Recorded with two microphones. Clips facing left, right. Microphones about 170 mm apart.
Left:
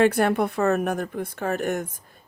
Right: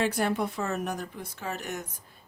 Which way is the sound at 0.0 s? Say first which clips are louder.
Left 8 dB; 60° left (ahead or behind).